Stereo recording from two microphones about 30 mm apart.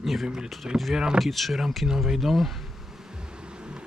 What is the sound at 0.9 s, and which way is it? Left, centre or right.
Speech, right.